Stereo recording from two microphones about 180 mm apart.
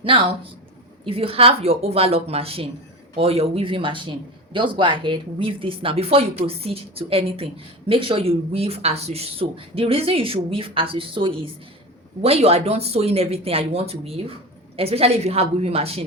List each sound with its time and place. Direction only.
0.0 s a woman's voice: 30° right (ahead or behind)